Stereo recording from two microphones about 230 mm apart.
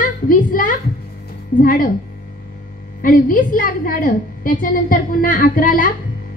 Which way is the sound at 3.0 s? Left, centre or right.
Left.